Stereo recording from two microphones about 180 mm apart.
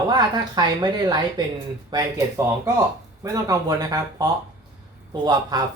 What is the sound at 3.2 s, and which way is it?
Speech, 20° right (ahead or behind).